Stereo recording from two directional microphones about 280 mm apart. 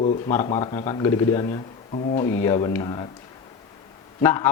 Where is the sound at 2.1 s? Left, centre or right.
Centre.